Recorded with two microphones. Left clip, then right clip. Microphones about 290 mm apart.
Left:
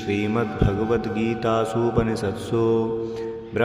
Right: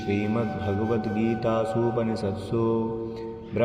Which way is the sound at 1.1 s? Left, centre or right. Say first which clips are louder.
Left 2 dB; centre.